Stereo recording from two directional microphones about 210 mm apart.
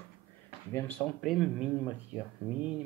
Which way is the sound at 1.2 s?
Centre (ahead or behind).